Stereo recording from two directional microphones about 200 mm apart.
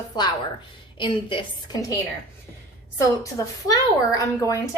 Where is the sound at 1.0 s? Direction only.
25° left (ahead or behind).